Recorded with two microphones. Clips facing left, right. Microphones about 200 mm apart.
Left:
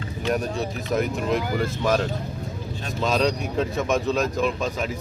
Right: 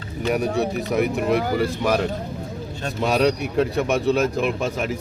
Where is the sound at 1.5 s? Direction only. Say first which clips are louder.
Right 2 dB; 10° right (ahead or behind).